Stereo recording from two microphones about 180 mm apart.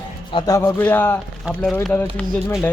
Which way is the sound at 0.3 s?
20° left (ahead or behind).